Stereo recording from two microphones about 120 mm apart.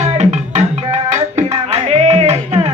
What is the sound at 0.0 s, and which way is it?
Music, 70° right (ahead or behind).